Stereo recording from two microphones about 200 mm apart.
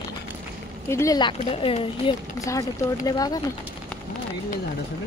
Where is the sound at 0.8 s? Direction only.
15° left (ahead or behind).